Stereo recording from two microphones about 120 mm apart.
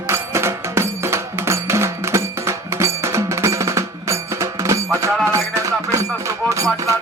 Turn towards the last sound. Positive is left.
turn(degrees=-25)  # may be behind; listen again after turning